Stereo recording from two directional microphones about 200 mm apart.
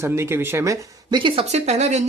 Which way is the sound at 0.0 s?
15° right (ahead or behind).